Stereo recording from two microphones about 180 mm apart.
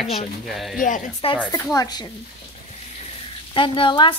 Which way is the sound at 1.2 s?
30° left (ahead or behind).